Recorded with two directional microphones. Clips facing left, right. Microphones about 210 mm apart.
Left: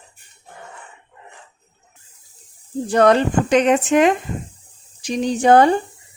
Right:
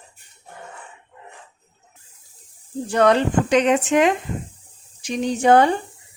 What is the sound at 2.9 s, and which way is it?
Speech, 40° left (ahead or behind).